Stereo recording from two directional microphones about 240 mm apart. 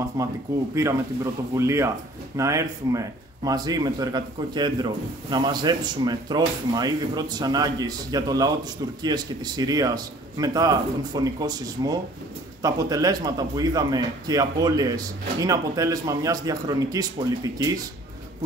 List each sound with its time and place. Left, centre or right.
0.2 s a man's voice: centre